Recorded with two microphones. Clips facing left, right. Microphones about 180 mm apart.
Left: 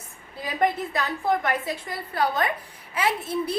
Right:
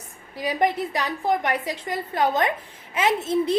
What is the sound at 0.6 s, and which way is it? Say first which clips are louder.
A woman's voice: even; 15° right (ahead or behind).